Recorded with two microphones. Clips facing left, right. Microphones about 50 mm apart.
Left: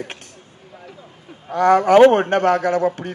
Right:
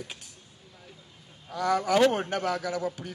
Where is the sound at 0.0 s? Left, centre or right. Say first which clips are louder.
Left 10 dB; left.